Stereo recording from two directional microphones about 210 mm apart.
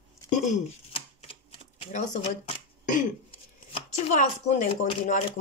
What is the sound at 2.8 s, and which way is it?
Chopping, 35° left (ahead or behind).